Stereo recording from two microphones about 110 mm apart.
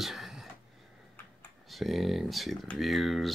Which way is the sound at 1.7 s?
Centre (ahead or behind).